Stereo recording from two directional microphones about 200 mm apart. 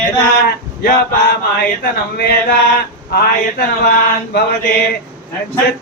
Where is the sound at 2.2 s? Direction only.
55° left (ahead or behind).